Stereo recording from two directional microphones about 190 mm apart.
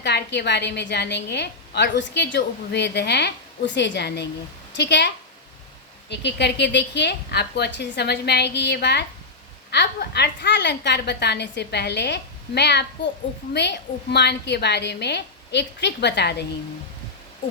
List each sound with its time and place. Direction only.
0.0 s a woman's voice: 65° left (ahead or behind)